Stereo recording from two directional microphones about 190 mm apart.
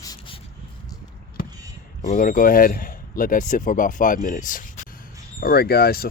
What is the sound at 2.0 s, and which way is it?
Speech, 45° left (ahead or behind).